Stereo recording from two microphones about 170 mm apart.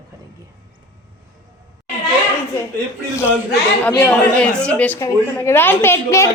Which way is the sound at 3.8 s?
10° left (ahead or behind).